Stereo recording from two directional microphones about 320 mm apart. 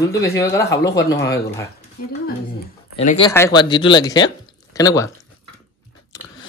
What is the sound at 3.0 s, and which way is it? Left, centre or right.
Speech, left.